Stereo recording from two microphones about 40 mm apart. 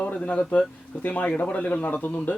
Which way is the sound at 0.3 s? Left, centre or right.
Left.